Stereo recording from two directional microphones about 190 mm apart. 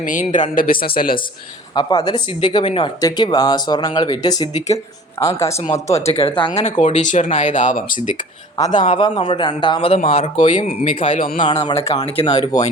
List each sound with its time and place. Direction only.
0.0 s speech: 45° left (ahead or behind)
1.7 s speech: 20° left (ahead or behind)
5.9 s speech: 35° left (ahead or behind)
8.5 s a man's voice: 20° left (ahead or behind); by 11.4 s 40° left (ahead or behind)
11.4 s speech: 30° left (ahead or behind)
11.9 s speech: 20° left (ahead or behind)